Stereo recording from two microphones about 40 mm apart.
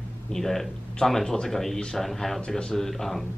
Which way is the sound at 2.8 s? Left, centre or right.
Centre.